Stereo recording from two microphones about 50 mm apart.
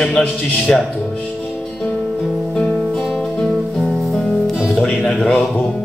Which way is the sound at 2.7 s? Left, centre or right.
Centre.